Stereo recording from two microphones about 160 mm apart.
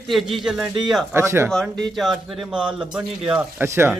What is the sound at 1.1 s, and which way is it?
Speech, 15° right (ahead or behind).